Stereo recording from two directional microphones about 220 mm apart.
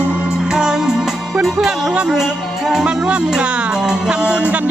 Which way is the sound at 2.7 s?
5° right (ahead or behind).